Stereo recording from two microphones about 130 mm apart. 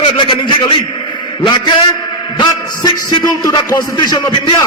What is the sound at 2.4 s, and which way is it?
A man's voice, 35° left (ahead or behind).